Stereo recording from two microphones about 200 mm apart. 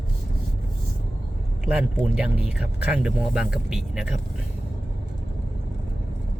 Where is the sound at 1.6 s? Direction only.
5° right (ahead or behind).